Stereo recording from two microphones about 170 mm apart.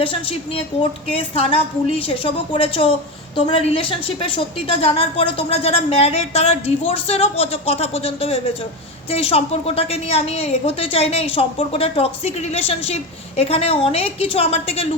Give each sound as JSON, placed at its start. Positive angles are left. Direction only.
{"t": 0.0, "sound": "a woman's voice", "side_deg": 35}